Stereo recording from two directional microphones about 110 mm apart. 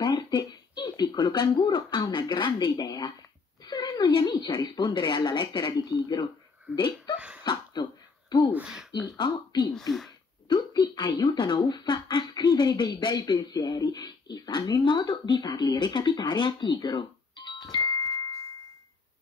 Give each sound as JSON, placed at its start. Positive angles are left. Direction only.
{"t": 0.0, "sound": "speech", "side_deg": 40}
{"t": 3.6, "sound": "a sound", "side_deg": 35}
{"t": 4.1, "sound": "speech", "side_deg": 40}
{"t": 5.7, "sound": "speech", "side_deg": 35}
{"t": 7.2, "sound": "laughter", "side_deg": -10}
{"t": 7.4, "sound": "throat clearing", "side_deg": 40}
{"t": 8.5, "sound": "speech", "side_deg": -10}
{"t": 9.0, "sound": "speech", "side_deg": 40}
{"t": 9.8, "sound": "speech", "side_deg": 0}
{"t": 10.5, "sound": "speech", "side_deg": 40}
{"t": 17.6, "sound": "music", "side_deg": 40}